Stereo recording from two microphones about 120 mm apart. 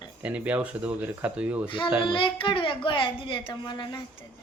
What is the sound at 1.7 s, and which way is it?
A woman's voice, 45° left (ahead or behind).